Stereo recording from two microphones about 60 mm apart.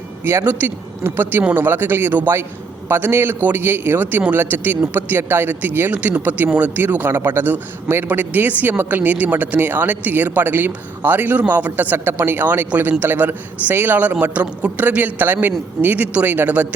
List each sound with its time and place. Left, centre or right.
0.3 s a man's voice: right
5.9 s a man's voice: right